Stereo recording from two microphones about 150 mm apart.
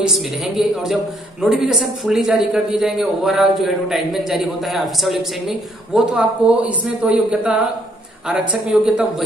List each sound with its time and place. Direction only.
0.0 s a man's voice: 5° right (ahead or behind)